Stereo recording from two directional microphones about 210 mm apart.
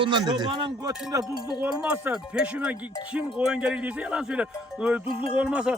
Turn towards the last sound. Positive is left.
turn(degrees=-5)  # may be behind; listen again after turning